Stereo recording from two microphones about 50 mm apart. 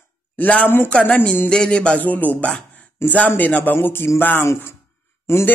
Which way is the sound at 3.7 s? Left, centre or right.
Left.